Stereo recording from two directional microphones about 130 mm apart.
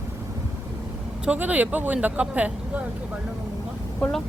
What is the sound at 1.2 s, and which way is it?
Speech, 10° right (ahead or behind).